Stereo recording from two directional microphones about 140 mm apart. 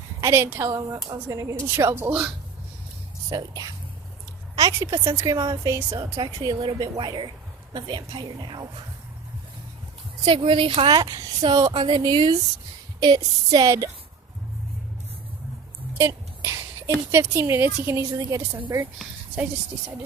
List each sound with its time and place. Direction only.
0.2 s a woman's voice: 20° right (ahead or behind)
3.2 s a woman's voice: 25° right (ahead or behind)
10.2 s a woman's voice: 40° right (ahead or behind); by 13.9 s 25° right (ahead or behind)
16.0 s a woman's voice: 15° right (ahead or behind)